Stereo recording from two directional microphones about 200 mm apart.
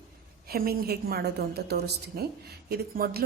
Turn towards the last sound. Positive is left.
turn(degrees=-50)  # may be behind; listen again after turning